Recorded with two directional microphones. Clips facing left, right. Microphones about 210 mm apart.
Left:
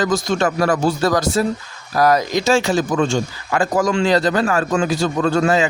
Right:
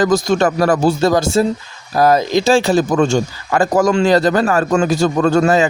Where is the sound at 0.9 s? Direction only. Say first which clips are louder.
Right 4 dB; 25° right (ahead or behind).